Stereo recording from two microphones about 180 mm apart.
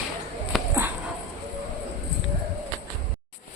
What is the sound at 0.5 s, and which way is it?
Dog, centre (ahead or behind).